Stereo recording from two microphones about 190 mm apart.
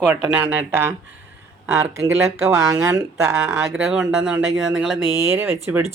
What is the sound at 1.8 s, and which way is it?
Speech, 15° right (ahead or behind).